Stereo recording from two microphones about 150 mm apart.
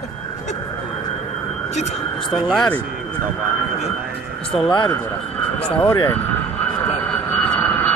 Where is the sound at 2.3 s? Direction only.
Centre (ahead or behind).